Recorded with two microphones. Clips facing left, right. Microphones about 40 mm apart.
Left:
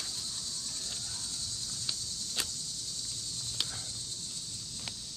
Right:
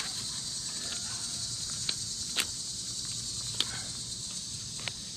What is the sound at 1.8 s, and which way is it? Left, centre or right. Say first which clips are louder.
Walk: right 2 dB; right.